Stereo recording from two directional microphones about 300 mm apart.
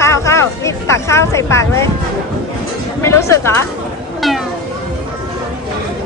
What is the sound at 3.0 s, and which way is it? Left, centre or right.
Speech, centre.